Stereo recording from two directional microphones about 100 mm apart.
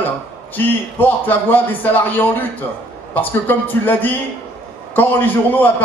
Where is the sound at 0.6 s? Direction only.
20° left (ahead or behind).